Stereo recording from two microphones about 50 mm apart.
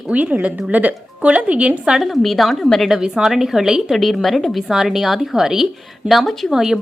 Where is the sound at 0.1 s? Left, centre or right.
Right.